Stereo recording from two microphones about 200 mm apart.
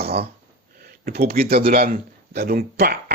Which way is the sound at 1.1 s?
50° right (ahead or behind).